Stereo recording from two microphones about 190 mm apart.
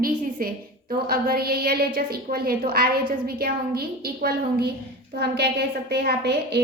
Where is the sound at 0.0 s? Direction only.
50° right (ahead or behind).